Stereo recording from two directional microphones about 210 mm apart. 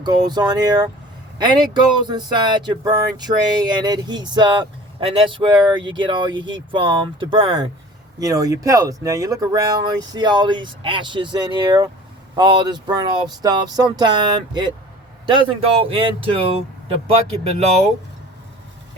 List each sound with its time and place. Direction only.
0.0 s speech: 20° right (ahead or behind)